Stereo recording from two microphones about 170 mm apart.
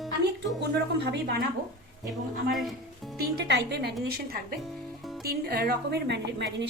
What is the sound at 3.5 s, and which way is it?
Speech, 80° right.